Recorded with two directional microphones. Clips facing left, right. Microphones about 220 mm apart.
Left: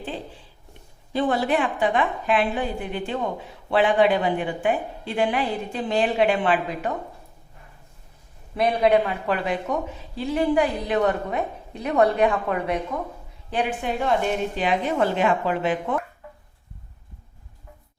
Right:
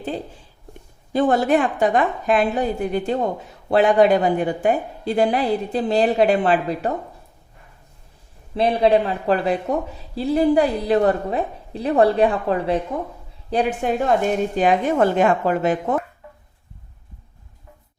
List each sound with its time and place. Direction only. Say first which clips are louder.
1.1 s a woman's voice: right 5 dB; 45° right (ahead or behind)
8.5 s a woman's voice: right 3 dB; 30° right (ahead or behind)